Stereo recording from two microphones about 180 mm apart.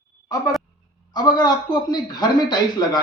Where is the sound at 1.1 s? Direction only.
25° left (ahead or behind).